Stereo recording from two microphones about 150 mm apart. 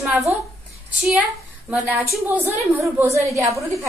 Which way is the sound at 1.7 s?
15° right (ahead or behind).